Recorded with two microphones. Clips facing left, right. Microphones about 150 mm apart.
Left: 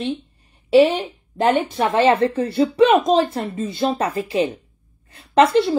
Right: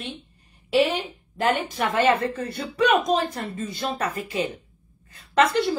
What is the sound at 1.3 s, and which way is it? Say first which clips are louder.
A woman's voice: left 6 dB; 25° left (ahead or behind).